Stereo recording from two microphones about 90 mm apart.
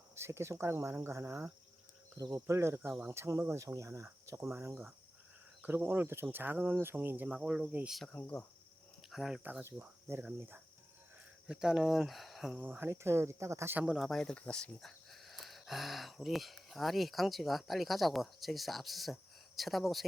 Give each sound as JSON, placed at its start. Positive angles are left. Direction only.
{"t": 0.2, "sound": "speech", "side_deg": -30}
{"t": 7.3, "sound": "speech", "side_deg": -5}
{"t": 8.0, "sound": "speech", "side_deg": 15}
{"t": 9.0, "sound": "speech", "side_deg": -5}
{"t": 9.4, "sound": "speech", "side_deg": -20}
{"t": 11.4, "sound": "speech", "side_deg": -5}
{"t": 12.5, "sound": "speech", "side_deg": -20}
{"t": 13.7, "sound": "speech", "side_deg": -15}
{"t": 14.0, "sound": "speech", "side_deg": 5}